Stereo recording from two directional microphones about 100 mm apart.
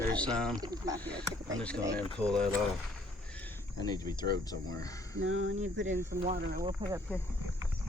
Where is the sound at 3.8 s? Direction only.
40° left (ahead or behind).